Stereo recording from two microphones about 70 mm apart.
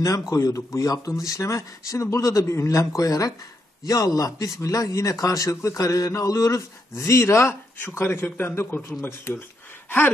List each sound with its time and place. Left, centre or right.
0.3 s speech: left
9.8 s gasp: left